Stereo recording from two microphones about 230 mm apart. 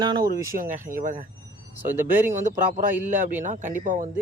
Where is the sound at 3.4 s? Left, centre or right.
Right.